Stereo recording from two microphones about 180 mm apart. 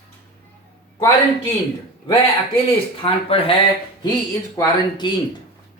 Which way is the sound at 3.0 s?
30° left (ahead or behind).